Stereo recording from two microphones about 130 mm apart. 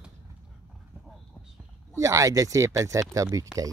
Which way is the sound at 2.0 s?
25° right (ahead or behind).